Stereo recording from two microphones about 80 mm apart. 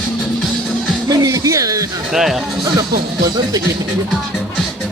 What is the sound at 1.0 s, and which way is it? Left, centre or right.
Speech, right.